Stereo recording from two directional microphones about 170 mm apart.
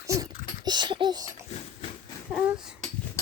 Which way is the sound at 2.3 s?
5° right (ahead or behind).